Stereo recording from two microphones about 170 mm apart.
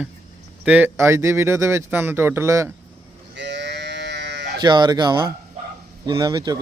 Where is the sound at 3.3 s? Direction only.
90° right.